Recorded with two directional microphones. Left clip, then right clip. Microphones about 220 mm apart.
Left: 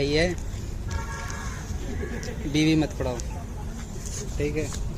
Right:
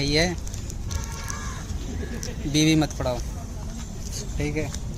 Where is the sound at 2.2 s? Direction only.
50° right (ahead or behind).